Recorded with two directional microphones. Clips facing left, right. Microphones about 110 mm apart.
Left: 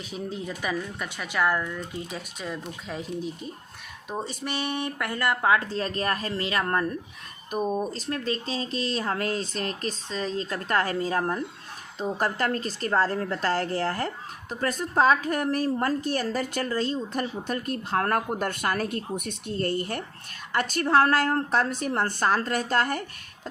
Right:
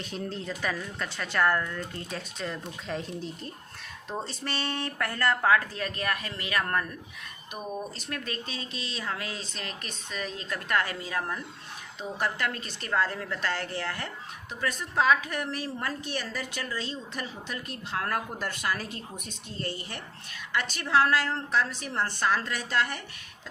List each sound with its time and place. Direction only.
0.0 s speech: 5° left (ahead or behind)
5.7 s a woman's voice: 30° left (ahead or behind)